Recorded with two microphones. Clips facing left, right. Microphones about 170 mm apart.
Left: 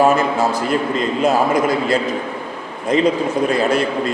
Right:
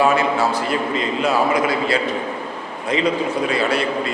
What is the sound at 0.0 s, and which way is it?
A man's voice, 45° left (ahead or behind).